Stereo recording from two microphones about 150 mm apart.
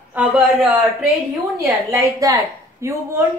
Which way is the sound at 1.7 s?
20° right (ahead or behind).